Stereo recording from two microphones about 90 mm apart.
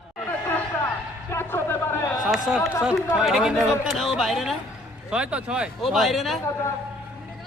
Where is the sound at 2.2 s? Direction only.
5° right (ahead or behind).